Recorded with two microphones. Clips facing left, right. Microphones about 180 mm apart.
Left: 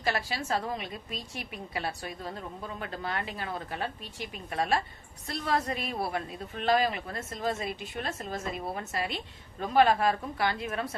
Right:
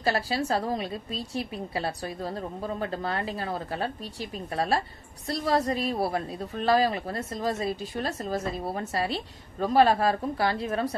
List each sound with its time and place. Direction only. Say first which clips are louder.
0.0 s a woman's voice: right 5 dB; 35° right (ahead or behind)